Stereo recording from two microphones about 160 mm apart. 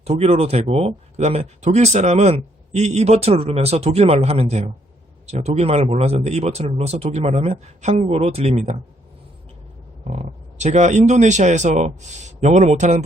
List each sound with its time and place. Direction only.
0.0 s speech: 40° right (ahead or behind)
10.0 s speech: 45° right (ahead or behind)